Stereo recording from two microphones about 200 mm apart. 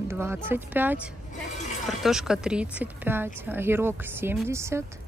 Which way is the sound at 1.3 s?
35° left (ahead or behind).